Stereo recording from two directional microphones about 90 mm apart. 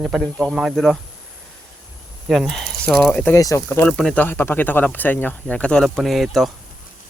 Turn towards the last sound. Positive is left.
turn(degrees=0)  # may be behind; listen again after turning